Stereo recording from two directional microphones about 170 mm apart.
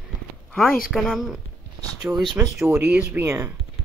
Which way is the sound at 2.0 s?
10° right (ahead or behind).